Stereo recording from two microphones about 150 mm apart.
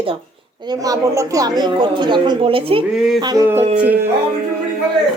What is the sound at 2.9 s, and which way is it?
Mantra, 5° right (ahead or behind).